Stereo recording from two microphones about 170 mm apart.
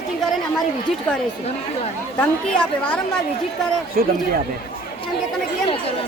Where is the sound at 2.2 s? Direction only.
10° left (ahead or behind).